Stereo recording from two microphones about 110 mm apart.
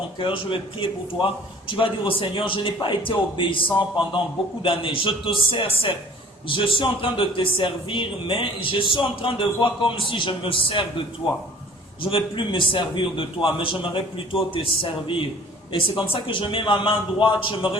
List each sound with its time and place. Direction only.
0.2 s a man's voice: 50° left (ahead or behind)
12.1 s a man's voice: 50° left (ahead or behind)
16.2 s a man's voice: 50° left (ahead or behind)